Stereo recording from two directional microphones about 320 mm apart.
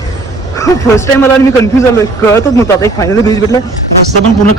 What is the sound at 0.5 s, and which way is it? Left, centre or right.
Speech, centre.